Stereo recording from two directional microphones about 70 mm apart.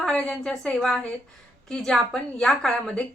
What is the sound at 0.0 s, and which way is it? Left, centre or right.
A woman's voice, centre.